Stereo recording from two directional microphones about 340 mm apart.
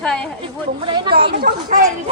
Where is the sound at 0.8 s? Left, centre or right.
Centre.